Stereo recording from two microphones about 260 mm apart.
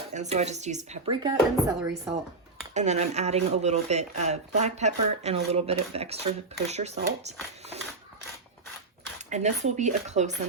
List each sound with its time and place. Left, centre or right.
0.1 s speech: right
2.7 s speech: right
9.3 s speech: right